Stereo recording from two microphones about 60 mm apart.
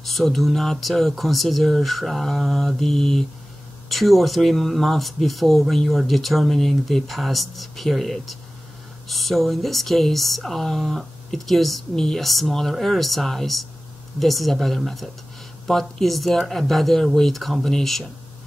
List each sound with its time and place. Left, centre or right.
0.0 s speech: centre